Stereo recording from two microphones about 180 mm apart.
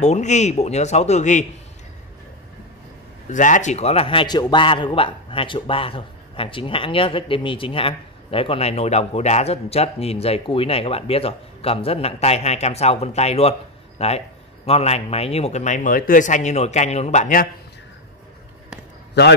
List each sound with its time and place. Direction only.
0.0 s a man's voice: 40° left (ahead or behind)
3.3 s a man's voice: 45° left (ahead or behind)